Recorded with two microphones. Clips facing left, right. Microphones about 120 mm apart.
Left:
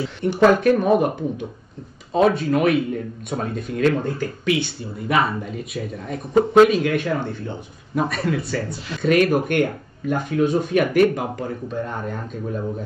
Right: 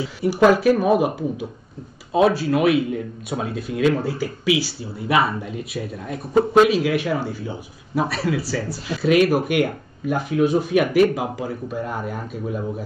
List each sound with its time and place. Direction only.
0.0 s speech: 5° right (ahead or behind)